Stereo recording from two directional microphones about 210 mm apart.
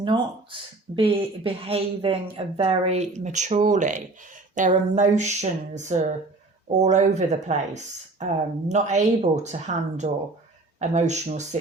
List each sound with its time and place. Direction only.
0.0 s speech: 25° right (ahead or behind)